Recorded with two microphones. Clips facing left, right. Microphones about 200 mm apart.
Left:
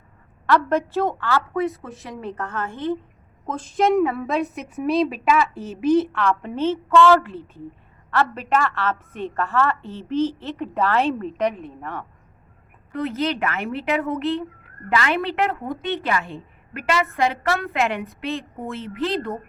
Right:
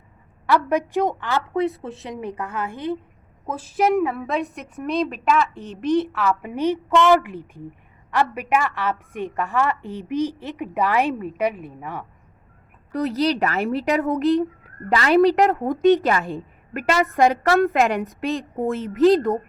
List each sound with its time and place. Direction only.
0.4 s a woman's voice: 15° right (ahead or behind)
1.8 s speech: 25° right (ahead or behind)
2.2 s a woman's voice: 15° right (ahead or behind)
12.9 s a woman's voice: 35° right (ahead or behind)